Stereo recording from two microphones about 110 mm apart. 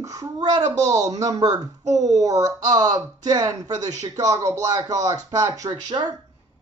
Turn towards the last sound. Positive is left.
turn(degrees=-40)  # may be behind; listen again after turning